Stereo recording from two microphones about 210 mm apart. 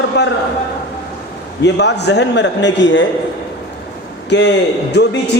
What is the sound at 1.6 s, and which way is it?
A man's voice, 55° left (ahead or behind).